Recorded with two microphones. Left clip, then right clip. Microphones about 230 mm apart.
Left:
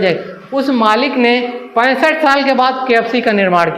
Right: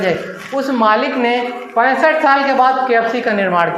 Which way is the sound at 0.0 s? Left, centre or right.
Left.